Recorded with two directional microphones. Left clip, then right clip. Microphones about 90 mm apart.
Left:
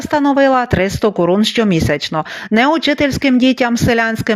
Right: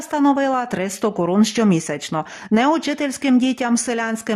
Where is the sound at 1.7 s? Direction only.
35° left (ahead or behind).